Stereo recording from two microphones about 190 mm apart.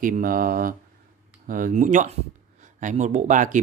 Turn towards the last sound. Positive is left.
turn(degrees=-40)  # may be behind; listen again after turning